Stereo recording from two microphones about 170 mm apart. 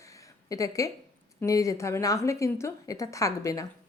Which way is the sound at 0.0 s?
20° left (ahead or behind).